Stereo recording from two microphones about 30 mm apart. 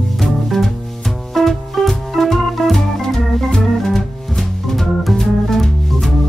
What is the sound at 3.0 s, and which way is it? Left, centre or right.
Organ, centre.